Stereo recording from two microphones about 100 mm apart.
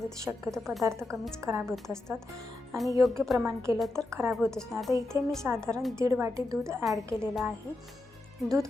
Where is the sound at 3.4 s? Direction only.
30° right (ahead or behind).